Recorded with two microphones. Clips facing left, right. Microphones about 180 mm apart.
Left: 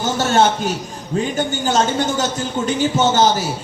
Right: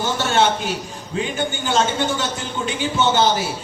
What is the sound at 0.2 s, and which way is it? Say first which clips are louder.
Speech: left 4 dB; 40° left (ahead or behind).